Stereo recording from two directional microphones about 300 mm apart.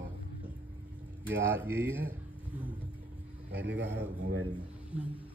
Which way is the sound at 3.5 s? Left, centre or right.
Right.